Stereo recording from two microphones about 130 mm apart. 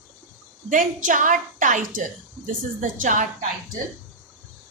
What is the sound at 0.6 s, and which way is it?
A woman's voice, 90° right.